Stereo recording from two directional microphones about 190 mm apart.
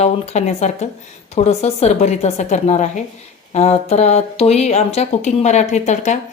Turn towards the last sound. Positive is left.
turn(degrees=40)  # may be behind; listen again after turning